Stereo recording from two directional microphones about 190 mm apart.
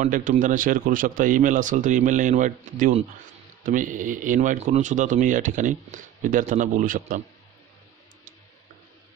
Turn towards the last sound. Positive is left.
turn(degrees=-45)  # may be behind; listen again after turning